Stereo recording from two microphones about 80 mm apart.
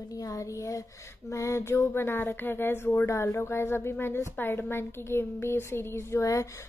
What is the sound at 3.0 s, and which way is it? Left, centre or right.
A woman's voice, left.